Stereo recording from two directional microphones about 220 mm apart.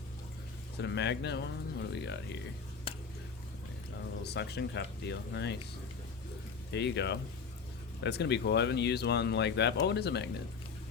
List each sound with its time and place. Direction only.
0.8 s speech: 50° left (ahead or behind)
2.9 s a sound: 25° left (ahead or behind)
4.2 s speech: 50° left (ahead or behind)
6.7 s speech: 50° left (ahead or behind)